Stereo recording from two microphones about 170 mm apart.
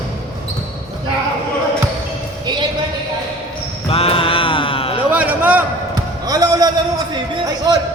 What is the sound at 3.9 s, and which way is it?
Mantra, 35° left (ahead or behind).